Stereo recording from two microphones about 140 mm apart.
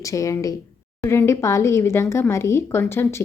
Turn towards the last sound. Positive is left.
turn(degrees=15)  # may be behind; listen again after turning